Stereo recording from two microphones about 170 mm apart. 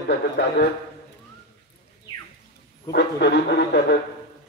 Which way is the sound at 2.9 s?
85° left.